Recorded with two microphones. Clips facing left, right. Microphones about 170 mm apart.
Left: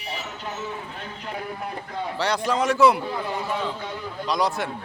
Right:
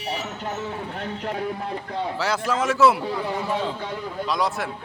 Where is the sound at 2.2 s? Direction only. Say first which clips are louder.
Left 2 dB; 5° right (ahead or behind).